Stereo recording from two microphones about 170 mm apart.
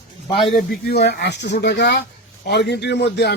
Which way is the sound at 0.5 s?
70° left (ahead or behind).